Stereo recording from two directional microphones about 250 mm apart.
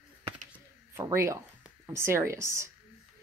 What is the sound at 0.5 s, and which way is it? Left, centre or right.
Speech, centre.